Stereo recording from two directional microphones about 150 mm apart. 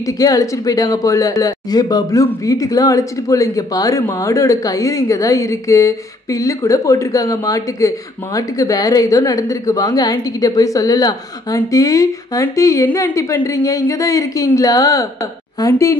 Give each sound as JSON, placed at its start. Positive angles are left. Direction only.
{"t": 0.0, "sound": "speech", "side_deg": 25}